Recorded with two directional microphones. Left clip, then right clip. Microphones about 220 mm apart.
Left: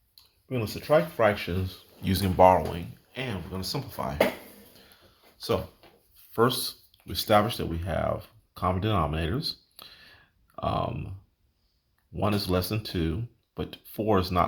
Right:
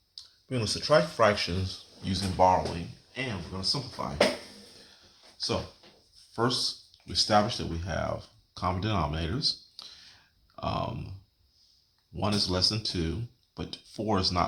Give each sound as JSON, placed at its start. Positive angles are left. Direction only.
{"t": 0.4, "sound": "speech", "side_deg": 10}
{"t": 2.0, "sound": "speech", "side_deg": 40}
{"t": 6.3, "sound": "speech", "side_deg": 40}
{"t": 12.1, "sound": "speech", "side_deg": 30}